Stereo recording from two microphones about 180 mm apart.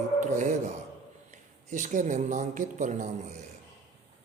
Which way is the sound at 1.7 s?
45° right (ahead or behind).